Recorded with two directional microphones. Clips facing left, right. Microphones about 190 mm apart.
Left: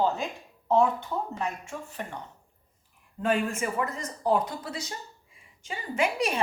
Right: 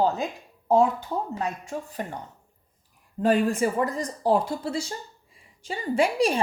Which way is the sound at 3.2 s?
35° right (ahead or behind).